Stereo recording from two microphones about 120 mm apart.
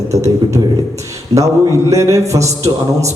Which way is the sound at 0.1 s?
25° right (ahead or behind).